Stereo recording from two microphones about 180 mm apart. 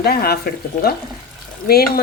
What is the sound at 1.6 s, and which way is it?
Speech, 60° left (ahead or behind).